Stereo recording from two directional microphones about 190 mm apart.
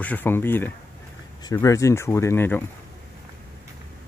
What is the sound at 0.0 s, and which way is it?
Speech, 10° left (ahead or behind).